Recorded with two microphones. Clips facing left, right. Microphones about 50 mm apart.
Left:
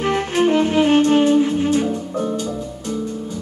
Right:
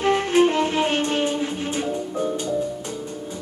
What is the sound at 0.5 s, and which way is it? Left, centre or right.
Music, left.